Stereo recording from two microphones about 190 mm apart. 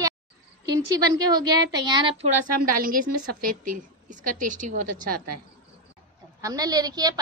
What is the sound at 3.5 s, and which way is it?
A woman's voice, 45° right (ahead or behind).